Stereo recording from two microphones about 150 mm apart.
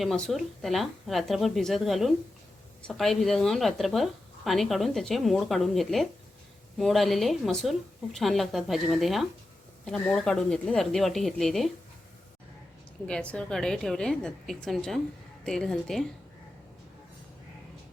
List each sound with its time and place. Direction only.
0.0 s speech: centre (ahead or behind)
13.1 s speech: 5° left (ahead or behind)